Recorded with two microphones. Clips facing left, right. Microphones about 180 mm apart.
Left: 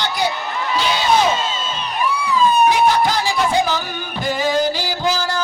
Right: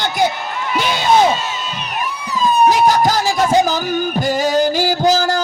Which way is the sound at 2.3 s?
40° right (ahead or behind).